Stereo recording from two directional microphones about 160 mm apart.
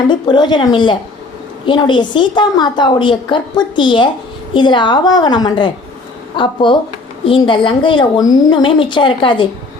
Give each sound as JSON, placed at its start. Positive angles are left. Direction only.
{"t": 0.1, "sound": "a woman's voice", "side_deg": 30}